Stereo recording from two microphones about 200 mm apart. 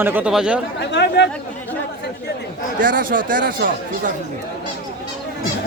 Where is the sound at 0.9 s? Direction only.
60° left (ahead or behind).